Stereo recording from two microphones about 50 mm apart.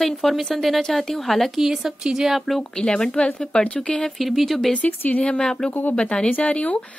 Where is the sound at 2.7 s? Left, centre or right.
Centre.